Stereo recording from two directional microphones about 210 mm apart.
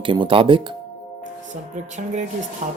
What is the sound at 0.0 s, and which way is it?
Speech, 25° right (ahead or behind).